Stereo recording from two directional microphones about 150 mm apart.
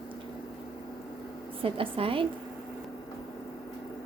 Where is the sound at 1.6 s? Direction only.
35° right (ahead or behind).